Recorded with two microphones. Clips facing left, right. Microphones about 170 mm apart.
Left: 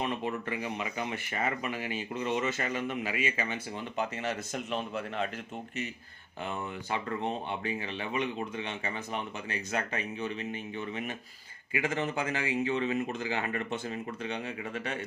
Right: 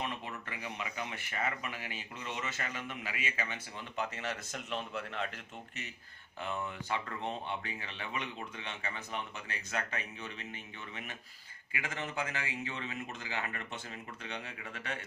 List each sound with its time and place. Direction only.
0.0 s speech: 25° left (ahead or behind)
7.5 s speech: 15° left (ahead or behind)
11.7 s speech: 25° left (ahead or behind)
14.3 s speech: 20° left (ahead or behind)